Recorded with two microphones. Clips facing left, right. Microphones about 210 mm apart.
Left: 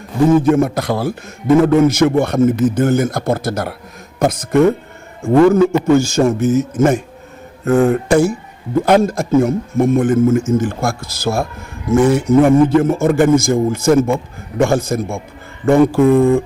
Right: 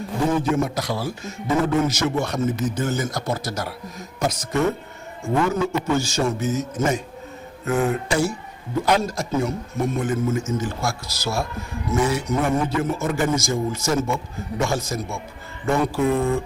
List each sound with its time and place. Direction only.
0.4 s a man's voice: 55° left (ahead or behind)